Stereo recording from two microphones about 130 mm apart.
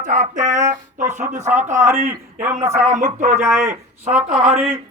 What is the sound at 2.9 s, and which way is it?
Speech, 70° right (ahead or behind).